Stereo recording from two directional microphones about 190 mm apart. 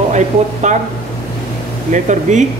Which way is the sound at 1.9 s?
40° right (ahead or behind).